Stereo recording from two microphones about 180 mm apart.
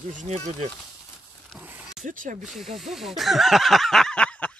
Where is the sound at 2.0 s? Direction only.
45° right (ahead or behind).